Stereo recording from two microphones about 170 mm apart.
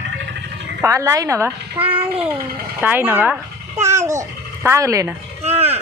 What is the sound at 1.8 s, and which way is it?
Child singing, 30° right (ahead or behind).